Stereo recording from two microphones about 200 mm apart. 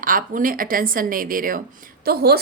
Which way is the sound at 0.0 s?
45° right (ahead or behind).